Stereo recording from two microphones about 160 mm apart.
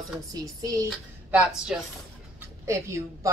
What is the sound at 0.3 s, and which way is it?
Speech, 25° right (ahead or behind).